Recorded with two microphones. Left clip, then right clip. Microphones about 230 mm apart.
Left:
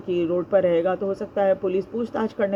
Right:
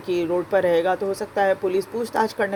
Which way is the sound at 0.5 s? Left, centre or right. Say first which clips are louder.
Right 1 dB; right.